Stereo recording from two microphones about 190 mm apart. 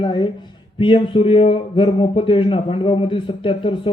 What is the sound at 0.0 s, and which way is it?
Speech, 25° left (ahead or behind).